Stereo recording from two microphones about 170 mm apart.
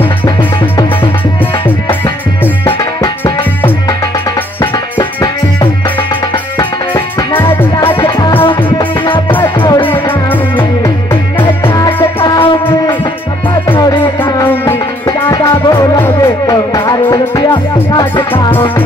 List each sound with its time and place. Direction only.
2.0 s music: 15° left (ahead or behind)
4.9 s music: 30° left (ahead or behind)
8.0 s music: 15° left (ahead or behind)
8.4 s music: 30° left (ahead or behind)
11.6 s music: 15° left (ahead or behind)
12.4 s music: 30° left (ahead or behind)
14.6 s music: 15° left (ahead or behind)